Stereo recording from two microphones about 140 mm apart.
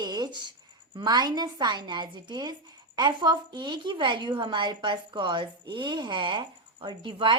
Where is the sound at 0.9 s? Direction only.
30° right (ahead or behind).